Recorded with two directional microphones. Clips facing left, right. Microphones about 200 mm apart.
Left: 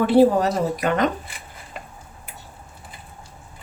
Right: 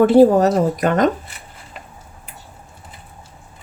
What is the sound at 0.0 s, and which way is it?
A woman's voice, 45° right (ahead or behind).